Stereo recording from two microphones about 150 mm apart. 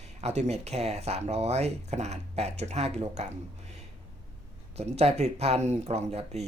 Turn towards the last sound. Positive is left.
turn(degrees=-45)  # may be behind; listen again after turning